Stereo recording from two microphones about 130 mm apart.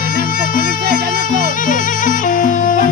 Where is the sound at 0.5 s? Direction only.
90° left.